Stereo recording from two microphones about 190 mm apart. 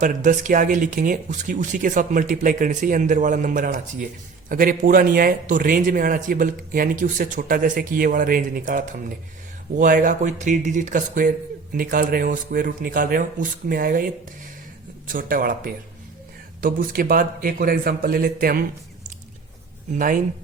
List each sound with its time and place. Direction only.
0.0 s speech: 45° right (ahead or behind)
19.9 s speech: 45° right (ahead or behind)